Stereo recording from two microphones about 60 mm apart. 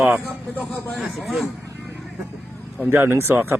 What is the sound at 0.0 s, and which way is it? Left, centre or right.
Speech, right.